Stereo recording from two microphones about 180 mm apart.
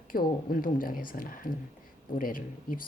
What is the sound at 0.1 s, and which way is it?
Speech, 50° left (ahead or behind).